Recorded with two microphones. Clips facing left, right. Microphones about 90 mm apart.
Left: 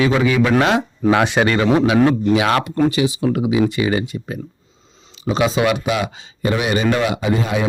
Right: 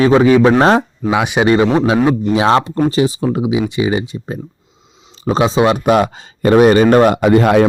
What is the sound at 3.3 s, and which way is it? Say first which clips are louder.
Speech: right 1 dB; 20° right (ahead or behind).